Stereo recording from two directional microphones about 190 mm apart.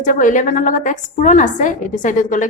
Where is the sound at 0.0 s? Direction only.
40° left (ahead or behind).